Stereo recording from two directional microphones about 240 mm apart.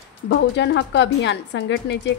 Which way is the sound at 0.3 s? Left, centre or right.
Left.